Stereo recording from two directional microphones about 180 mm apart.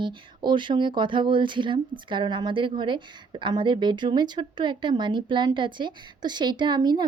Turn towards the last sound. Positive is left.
turn(degrees=-25)  # may be behind; listen again after turning